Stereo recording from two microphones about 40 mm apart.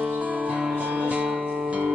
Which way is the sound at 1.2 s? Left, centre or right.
Centre.